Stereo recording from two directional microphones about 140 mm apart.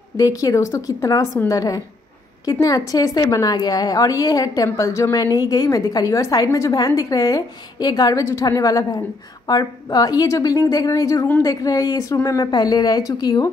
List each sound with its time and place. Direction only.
0.2 s a woman's voice: 25° left (ahead or behind)